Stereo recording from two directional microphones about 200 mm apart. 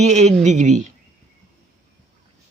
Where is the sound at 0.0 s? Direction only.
35° right (ahead or behind).